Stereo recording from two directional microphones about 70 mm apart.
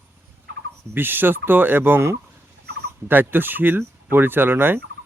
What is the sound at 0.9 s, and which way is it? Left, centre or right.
Speech, right.